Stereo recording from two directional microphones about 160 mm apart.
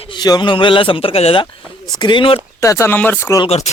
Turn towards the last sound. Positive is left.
turn(degrees=45)  # may be behind; listen again after turning